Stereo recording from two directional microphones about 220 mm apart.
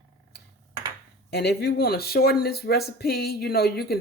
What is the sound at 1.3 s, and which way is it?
Speech, 50° left (ahead or behind).